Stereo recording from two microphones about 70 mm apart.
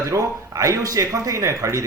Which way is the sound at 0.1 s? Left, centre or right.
Right.